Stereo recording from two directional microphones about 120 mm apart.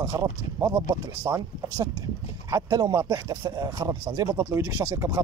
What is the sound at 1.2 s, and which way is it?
Speech, 20° right (ahead or behind).